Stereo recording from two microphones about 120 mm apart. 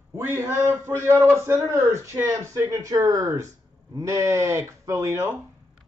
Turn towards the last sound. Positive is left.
turn(degrees=-25)  # may be behind; listen again after turning